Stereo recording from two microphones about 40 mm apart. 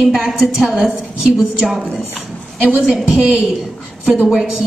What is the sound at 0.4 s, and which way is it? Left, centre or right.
Speech, centre.